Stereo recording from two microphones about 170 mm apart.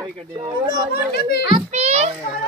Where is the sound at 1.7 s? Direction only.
40° right (ahead or behind).